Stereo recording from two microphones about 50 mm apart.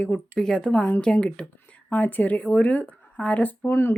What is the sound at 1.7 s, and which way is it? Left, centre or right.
Speech, left.